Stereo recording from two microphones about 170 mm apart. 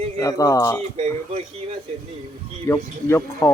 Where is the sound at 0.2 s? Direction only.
20° left (ahead or behind).